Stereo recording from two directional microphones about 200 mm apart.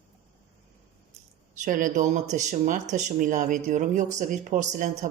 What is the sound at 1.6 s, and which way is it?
A woman's voice, 40° right (ahead or behind).